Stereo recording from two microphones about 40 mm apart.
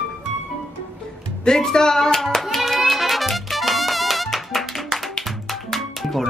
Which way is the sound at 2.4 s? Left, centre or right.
Centre.